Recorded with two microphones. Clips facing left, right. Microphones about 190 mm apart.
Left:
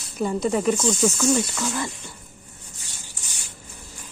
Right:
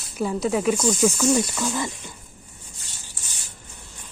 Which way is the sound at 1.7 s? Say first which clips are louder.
Right 1 dB; 15° right (ahead or behind).